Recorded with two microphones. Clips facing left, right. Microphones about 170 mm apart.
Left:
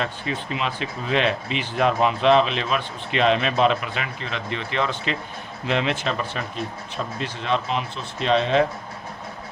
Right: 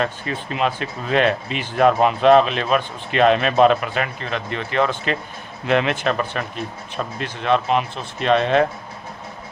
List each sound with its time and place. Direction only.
0.0 s speech: 50° right (ahead or behind)